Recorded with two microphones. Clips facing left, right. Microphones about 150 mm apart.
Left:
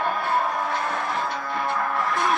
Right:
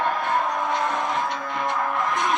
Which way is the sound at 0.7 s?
20° right (ahead or behind).